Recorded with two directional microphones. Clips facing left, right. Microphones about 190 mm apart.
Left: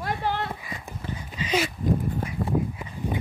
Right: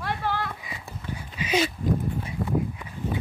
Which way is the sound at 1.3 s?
10° right (ahead or behind).